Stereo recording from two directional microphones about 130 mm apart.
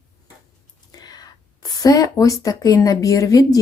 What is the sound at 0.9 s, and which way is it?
A woman's voice, 30° left (ahead or behind).